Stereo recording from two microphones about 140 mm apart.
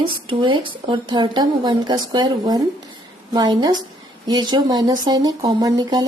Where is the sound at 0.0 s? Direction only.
35° right (ahead or behind).